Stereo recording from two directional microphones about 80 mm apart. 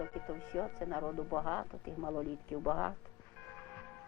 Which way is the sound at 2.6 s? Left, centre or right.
Left.